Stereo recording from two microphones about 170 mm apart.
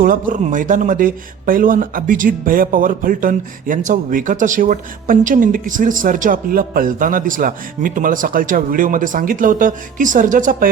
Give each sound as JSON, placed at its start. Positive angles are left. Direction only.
{"t": 0.0, "sound": "speech", "side_deg": -55}